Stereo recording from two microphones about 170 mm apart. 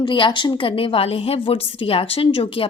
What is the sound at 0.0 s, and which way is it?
A woman's voice, 30° left (ahead or behind).